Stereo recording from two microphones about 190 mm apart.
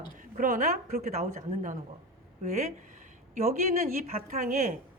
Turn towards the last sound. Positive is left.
turn(degrees=-40)  # may be behind; listen again after turning